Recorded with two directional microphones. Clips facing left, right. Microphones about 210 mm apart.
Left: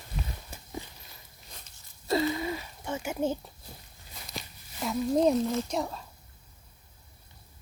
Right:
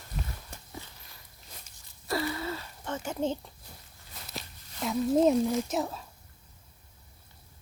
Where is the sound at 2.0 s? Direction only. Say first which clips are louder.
Left 4 dB; 20° left (ahead or behind).